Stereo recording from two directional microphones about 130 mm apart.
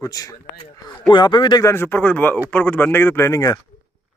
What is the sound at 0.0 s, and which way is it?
A man's voice, 25° left (ahead or behind).